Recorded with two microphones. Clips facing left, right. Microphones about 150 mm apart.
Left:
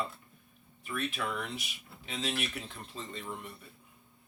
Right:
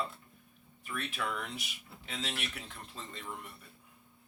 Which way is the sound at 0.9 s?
10° left (ahead or behind).